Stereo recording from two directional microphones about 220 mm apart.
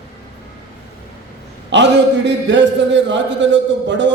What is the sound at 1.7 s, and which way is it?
A man's voice, 55° right (ahead or behind).